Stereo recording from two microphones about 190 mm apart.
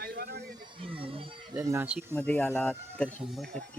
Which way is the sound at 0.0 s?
55° right (ahead or behind).